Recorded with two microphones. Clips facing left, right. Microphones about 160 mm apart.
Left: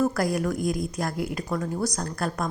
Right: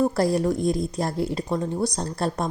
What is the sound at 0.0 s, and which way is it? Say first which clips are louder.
A woman's voice: right 3 dB; 30° right (ahead or behind).